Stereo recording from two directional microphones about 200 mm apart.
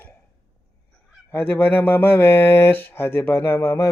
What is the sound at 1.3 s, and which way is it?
Speech, 10° left (ahead or behind).